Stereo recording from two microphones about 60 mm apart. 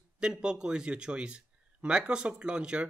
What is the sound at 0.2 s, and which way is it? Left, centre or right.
Speech, centre.